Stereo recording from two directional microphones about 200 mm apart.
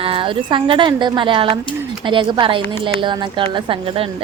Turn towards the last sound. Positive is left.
turn(degrees=-25)  # may be behind; listen again after turning